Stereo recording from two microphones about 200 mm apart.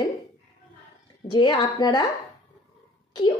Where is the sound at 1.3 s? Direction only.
25° left (ahead or behind).